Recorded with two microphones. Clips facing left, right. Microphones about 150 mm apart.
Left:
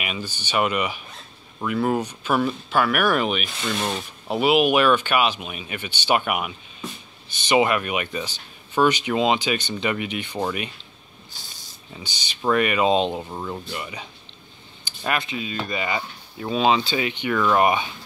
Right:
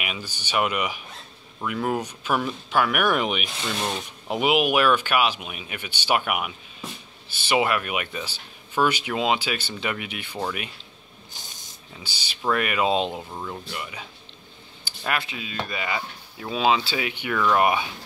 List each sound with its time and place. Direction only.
0.0 s speech: 10° right (ahead or behind)
1.6 s speech: centre (ahead or behind)
2.0 s speech: 10° right (ahead or behind)
3.8 s speech: centre (ahead or behind)
4.4 s speech: 10° right (ahead or behind)
11.3 s spray: 20° right (ahead or behind)
12.0 s speech: 5° right (ahead or behind)
13.2 s speech: 10° left (ahead or behind)
13.7 s speech: centre (ahead or behind)